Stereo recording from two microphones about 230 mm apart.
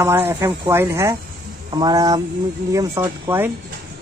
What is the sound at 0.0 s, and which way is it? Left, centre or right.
Speech, centre.